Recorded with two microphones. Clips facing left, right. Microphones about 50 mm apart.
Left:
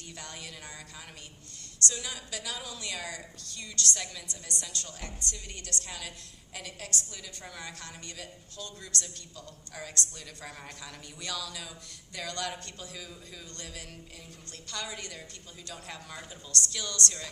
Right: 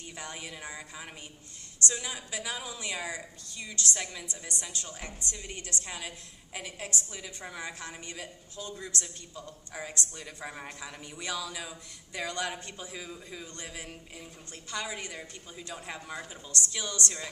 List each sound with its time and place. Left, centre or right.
0.1 s a woman's voice: centre